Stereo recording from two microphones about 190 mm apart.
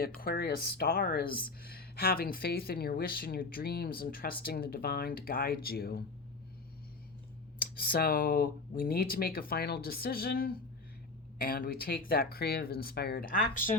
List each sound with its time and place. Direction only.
0.2 s speech: 55° left (ahead or behind)
7.6 s speech: 50° left (ahead or behind)